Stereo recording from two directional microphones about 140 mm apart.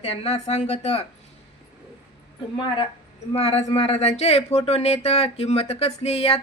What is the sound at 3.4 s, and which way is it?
Speech, 45° left (ahead or behind).